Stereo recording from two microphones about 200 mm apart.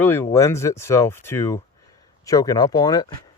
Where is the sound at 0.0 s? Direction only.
10° left (ahead or behind).